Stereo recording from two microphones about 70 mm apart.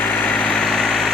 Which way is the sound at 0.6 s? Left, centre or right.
Centre.